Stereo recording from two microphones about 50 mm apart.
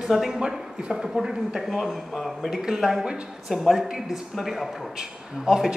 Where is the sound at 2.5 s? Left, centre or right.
Centre.